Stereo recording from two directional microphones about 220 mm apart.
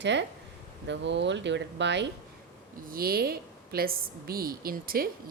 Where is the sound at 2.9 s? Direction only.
40° right (ahead or behind).